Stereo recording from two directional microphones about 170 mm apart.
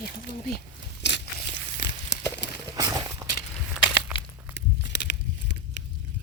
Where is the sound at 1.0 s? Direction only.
90° left.